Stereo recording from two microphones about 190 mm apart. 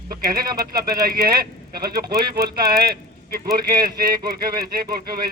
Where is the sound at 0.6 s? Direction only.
50° right (ahead or behind).